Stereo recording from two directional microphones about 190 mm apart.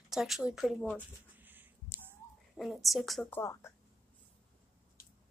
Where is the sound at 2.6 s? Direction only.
Centre (ahead or behind).